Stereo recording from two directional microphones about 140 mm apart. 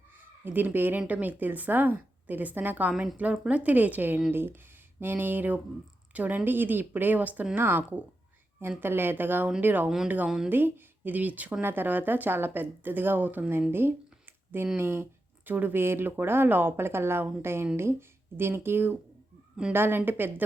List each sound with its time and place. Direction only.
0.4 s speech: 15° right (ahead or behind)